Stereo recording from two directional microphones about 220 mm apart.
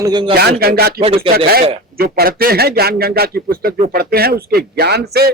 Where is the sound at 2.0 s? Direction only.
45° right (ahead or behind).